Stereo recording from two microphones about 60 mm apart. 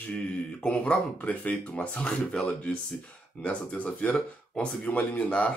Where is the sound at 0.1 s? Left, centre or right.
Left.